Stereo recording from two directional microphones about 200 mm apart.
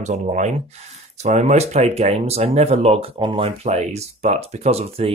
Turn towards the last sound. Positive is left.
turn(degrees=-30)  # may be behind; listen again after turning